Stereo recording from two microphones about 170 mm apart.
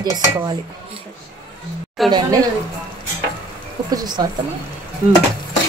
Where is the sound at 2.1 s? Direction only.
25° right (ahead or behind).